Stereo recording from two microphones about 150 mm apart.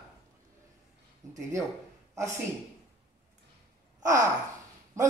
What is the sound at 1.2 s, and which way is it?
Speech, 20° right (ahead or behind).